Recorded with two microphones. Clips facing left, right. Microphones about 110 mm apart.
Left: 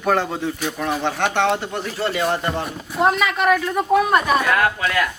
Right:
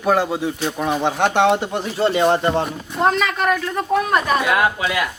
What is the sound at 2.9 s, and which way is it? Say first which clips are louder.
A man's voice: left 2 dB; 5° left (ahead or behind).